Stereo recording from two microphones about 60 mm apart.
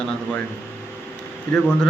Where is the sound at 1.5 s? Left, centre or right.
Centre.